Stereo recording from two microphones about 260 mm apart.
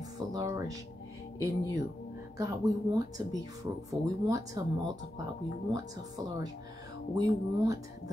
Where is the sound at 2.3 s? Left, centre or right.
Centre.